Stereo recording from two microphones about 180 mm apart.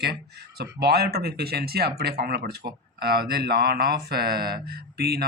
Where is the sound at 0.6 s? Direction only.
65° right (ahead or behind).